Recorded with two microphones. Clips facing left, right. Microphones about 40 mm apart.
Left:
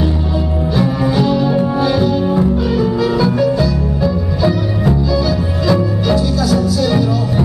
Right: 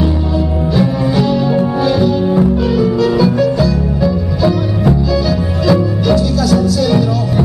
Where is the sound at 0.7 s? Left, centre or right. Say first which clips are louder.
Right 1 dB; centre.